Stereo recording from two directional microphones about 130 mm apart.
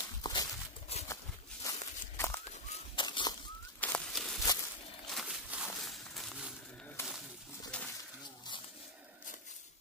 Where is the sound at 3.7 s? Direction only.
10° left (ahead or behind).